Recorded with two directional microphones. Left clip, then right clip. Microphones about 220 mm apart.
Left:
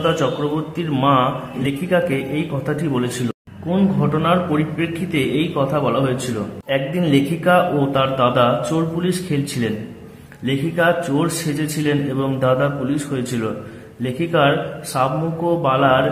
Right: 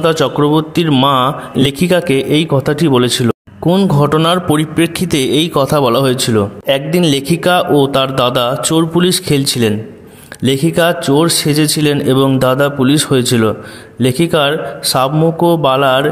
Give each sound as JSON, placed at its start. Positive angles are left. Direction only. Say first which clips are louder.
{"t": 0.0, "sound": "a man's voice", "louder": "right 7 dB", "side_deg": -45}